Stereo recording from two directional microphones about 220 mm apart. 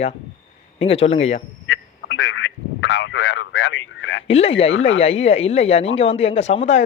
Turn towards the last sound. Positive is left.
turn(degrees=30)  # may be behind; listen again after turning